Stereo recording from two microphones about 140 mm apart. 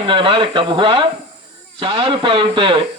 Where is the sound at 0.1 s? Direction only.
35° right (ahead or behind).